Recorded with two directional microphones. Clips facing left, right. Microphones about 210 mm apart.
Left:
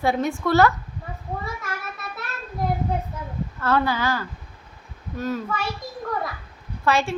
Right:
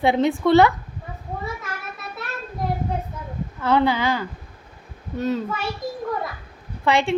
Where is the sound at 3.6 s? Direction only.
20° right (ahead or behind).